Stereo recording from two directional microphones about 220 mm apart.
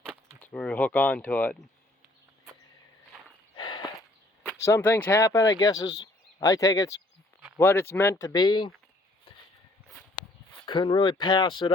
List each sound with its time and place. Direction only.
0.3 s speech: 5° left (ahead or behind)
3.5 s walk: 20° left (ahead or behind)
4.4 s speech: 10° left (ahead or behind)
10.5 s speech: 20° left (ahead or behind)